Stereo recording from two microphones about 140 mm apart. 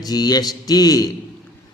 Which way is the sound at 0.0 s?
30° left (ahead or behind).